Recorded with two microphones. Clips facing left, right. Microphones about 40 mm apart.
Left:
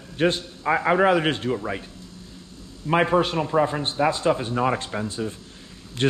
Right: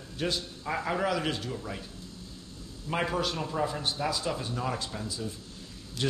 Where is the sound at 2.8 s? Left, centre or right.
Left.